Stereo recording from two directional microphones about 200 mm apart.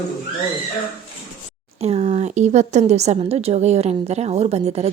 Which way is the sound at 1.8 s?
35° right (ahead or behind).